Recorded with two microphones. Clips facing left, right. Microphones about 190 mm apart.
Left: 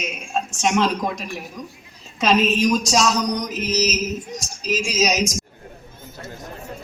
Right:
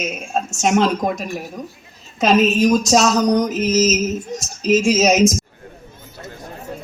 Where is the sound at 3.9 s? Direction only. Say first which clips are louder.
Right 5 dB; 25° right (ahead or behind).